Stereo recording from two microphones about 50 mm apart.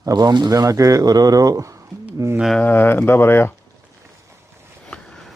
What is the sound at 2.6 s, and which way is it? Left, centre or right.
Speech, left.